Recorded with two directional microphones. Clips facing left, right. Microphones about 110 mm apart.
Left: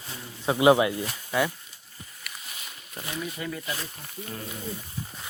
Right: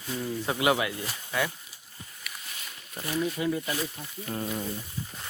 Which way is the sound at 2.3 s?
Centre (ahead or behind).